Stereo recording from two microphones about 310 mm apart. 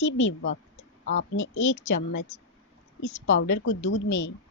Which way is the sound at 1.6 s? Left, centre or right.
Left.